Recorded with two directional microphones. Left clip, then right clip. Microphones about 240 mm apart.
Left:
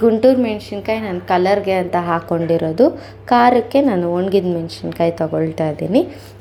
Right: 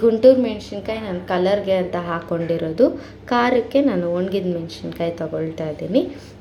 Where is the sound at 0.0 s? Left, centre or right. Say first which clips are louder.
Even; left.